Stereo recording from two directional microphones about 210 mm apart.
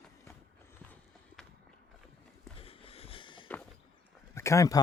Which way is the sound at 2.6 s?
25° left (ahead or behind).